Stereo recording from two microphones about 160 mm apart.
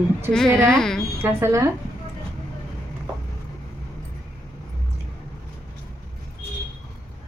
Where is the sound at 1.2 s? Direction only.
15° right (ahead or behind).